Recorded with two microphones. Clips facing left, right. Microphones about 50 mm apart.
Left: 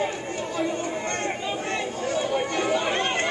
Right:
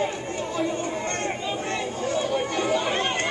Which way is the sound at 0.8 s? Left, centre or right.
Centre.